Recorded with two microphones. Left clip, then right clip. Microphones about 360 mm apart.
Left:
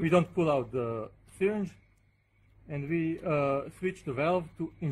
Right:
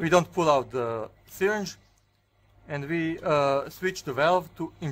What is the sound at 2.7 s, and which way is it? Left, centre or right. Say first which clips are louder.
Speech: right 3 dB; right.